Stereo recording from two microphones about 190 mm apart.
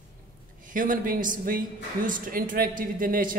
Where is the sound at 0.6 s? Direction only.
45° right (ahead or behind).